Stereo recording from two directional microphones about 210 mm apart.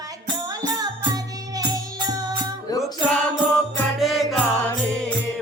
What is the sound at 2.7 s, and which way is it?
Music, 20° left (ahead or behind).